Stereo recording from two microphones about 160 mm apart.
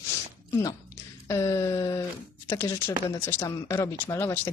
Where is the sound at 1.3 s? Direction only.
15° left (ahead or behind).